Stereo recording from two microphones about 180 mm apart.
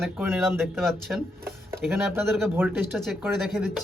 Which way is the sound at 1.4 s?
15° right (ahead or behind).